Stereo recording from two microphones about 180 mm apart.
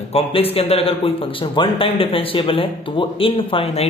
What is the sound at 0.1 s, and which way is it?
Speech, 35° left (ahead or behind).